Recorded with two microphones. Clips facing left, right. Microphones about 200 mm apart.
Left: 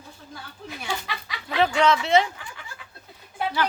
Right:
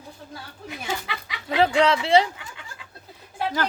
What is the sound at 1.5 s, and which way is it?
Speech, 30° right (ahead or behind).